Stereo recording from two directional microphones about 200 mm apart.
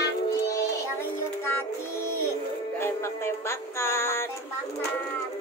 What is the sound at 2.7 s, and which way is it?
Music, 15° left (ahead or behind).